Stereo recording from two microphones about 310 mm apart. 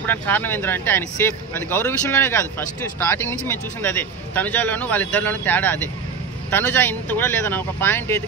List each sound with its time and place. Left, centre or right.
0.0 s a man's voice: centre